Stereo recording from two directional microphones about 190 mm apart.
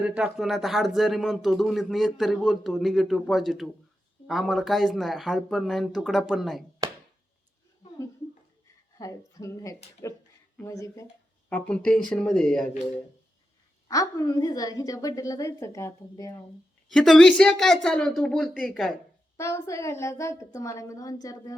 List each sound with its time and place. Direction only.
0.0 s speech: 5° right (ahead or behind)
9.0 s a woman's voice: 15° left (ahead or behind)
11.4 s speech: 5° left (ahead or behind)
13.8 s a woman's voice: 20° left (ahead or behind)
16.9 s speech: 5° left (ahead or behind)
19.4 s a woman's voice: 15° left (ahead or behind)